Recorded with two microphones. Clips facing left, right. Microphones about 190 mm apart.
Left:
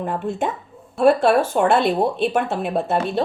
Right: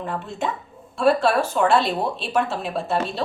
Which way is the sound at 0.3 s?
50° left (ahead or behind).